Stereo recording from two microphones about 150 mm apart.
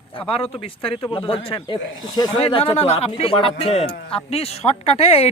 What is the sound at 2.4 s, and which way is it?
Speech, 40° left (ahead or behind).